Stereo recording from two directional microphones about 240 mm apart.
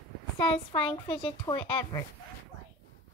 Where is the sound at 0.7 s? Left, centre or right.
Centre.